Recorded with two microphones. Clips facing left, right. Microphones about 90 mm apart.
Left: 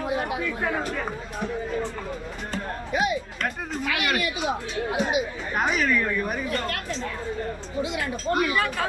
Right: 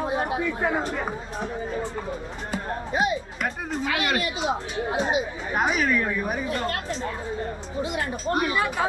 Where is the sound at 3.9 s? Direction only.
20° right (ahead or behind).